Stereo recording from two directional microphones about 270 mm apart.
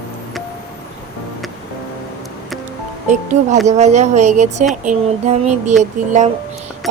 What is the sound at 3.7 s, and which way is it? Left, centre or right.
Speech, right.